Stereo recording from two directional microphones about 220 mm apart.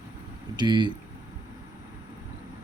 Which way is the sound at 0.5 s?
20° right (ahead or behind).